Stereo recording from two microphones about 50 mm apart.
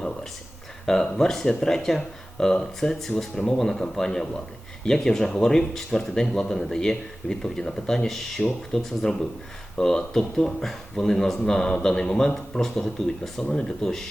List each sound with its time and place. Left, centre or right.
0.9 s speech: centre
13.4 s speech: left